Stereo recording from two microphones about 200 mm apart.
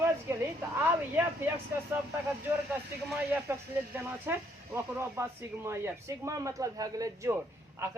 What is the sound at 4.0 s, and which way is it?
A man's voice, 10° right (ahead or behind).